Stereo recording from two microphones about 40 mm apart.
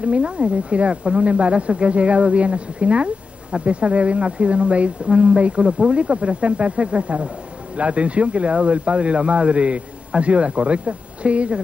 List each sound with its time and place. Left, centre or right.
0.0 s speech: right